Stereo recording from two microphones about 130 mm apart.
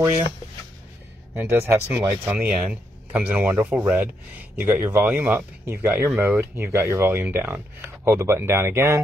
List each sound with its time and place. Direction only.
1.3 s speech: 15° right (ahead or behind)